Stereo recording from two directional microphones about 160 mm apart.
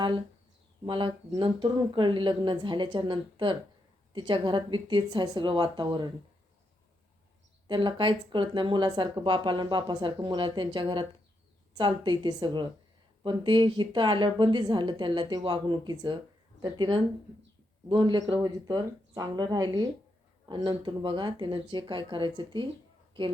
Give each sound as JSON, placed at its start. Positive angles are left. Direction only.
{"t": 0.9, "sound": "speech", "side_deg": -30}
{"t": 7.7, "sound": "speech", "side_deg": -30}